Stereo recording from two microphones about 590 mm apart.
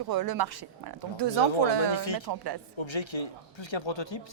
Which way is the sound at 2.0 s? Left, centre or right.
Left.